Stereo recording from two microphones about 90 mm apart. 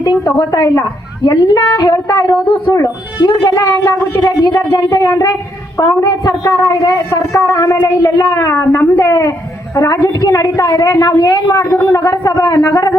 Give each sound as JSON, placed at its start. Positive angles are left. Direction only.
{"t": 0.3, "sound": "a woman's voice", "side_deg": 45}
{"t": 4.4, "sound": "a woman's voice", "side_deg": 45}
{"t": 8.4, "sound": "a woman's voice", "side_deg": 35}